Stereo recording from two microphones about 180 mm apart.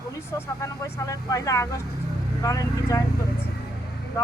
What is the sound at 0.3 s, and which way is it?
A woman's voice, 15° left (ahead or behind).